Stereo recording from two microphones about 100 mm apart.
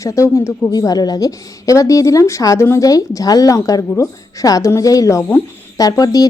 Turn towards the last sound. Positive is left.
turn(degrees=40)  # may be behind; listen again after turning